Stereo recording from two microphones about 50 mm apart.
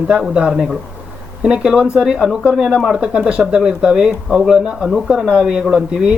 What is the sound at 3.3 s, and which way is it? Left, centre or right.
Speech, centre.